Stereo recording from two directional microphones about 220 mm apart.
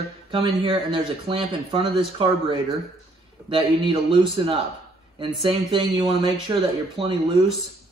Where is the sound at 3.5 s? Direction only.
20° right (ahead or behind).